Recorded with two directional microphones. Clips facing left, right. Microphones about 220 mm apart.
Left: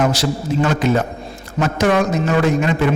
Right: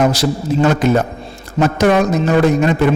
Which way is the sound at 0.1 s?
40° right (ahead or behind).